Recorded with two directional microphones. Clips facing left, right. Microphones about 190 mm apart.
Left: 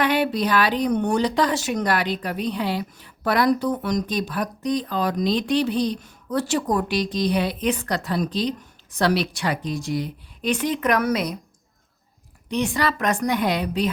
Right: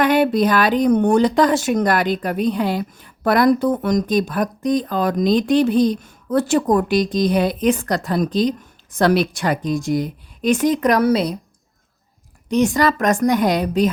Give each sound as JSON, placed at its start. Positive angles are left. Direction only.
{"t": 0.0, "sound": "speech", "side_deg": -45}
{"t": 12.5, "sound": "speech", "side_deg": -45}